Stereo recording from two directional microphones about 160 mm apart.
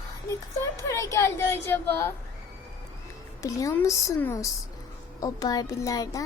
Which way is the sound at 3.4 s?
20° left (ahead or behind).